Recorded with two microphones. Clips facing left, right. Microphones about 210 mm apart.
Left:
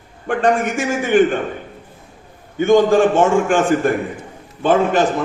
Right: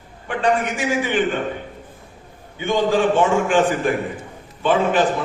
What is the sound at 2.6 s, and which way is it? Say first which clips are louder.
A man's voice: left 6 dB; 45° left (ahead or behind).